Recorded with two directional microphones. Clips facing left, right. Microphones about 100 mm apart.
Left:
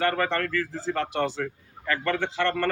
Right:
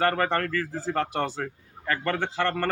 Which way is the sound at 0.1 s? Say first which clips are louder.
Right 1 dB; 35° right (ahead or behind).